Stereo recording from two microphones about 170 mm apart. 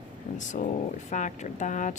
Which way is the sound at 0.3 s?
45° left (ahead or behind).